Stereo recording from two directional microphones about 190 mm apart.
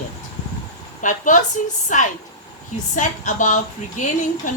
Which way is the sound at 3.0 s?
40° left (ahead or behind).